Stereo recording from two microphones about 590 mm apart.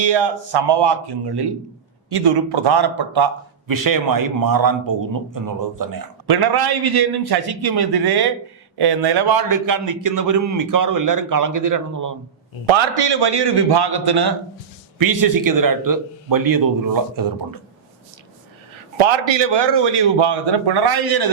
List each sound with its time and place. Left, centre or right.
0.0 s a man's voice: right
12.6 s a man's voice: right
18.9 s a man's voice: right